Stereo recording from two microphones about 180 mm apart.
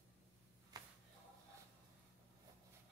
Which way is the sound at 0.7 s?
20° right (ahead or behind).